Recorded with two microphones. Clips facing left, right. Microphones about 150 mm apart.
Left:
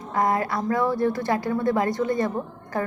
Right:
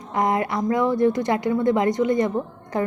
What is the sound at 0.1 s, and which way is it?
A woman's voice, 20° right (ahead or behind).